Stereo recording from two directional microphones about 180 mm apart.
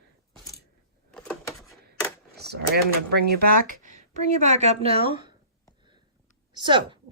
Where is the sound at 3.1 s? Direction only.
65° right (ahead or behind).